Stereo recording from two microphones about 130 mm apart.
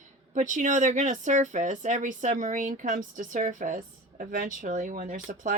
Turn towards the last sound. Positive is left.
turn(degrees=-80)